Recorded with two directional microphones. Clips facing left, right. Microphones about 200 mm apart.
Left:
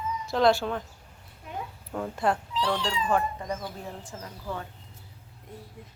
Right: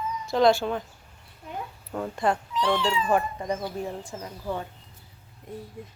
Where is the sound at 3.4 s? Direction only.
15° right (ahead or behind).